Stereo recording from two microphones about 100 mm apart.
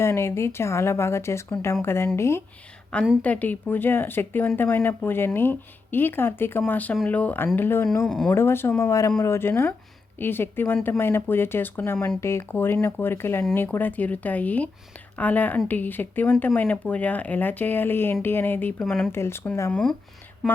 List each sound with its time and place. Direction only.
0.0 s speech: 25° left (ahead or behind)
3.2 s speech: 15° left (ahead or behind)
8.0 s speech: 5° left (ahead or behind)
8.3 s speech: 25° left (ahead or behind)
18.8 s speech: 5° left (ahead or behind)
19.1 s speech: 25° left (ahead or behind)
19.7 s speech: 5° left (ahead or behind)